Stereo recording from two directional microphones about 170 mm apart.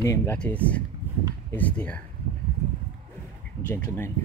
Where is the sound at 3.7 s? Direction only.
15° left (ahead or behind).